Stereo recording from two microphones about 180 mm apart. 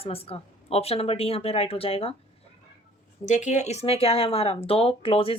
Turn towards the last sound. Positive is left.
turn(degrees=30)  # may be behind; listen again after turning